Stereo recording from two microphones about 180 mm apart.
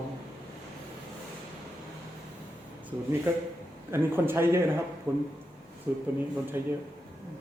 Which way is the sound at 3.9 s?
10° right (ahead or behind).